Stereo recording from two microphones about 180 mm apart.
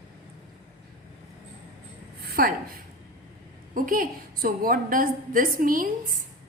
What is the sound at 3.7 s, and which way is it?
A woman's voice, 50° right (ahead or behind).